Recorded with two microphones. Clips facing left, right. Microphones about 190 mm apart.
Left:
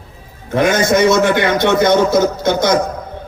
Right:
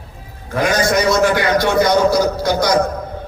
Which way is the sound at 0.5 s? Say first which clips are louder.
Left 3 dB; 25° left (ahead or behind).